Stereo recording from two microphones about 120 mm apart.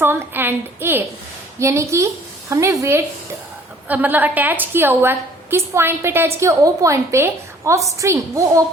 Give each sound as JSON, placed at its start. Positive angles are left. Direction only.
{"t": 0.0, "sound": "a woman's voice", "side_deg": -20}
{"t": 3.8, "sound": "a woman's voice", "side_deg": -15}